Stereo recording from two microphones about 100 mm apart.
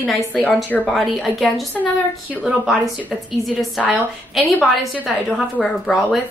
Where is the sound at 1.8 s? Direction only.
15° left (ahead or behind).